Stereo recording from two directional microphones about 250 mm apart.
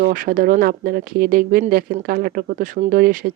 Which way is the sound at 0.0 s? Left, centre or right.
Right.